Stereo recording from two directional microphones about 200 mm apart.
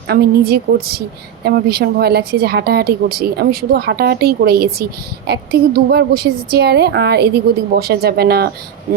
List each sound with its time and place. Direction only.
0.1 s speech: 50° right (ahead or behind)